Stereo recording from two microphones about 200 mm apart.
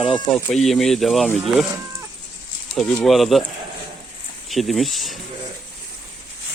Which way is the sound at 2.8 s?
Centre (ahead or behind).